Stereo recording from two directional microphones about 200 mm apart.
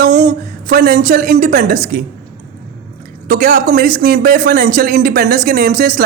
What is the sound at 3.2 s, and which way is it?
Speech, 40° right (ahead or behind).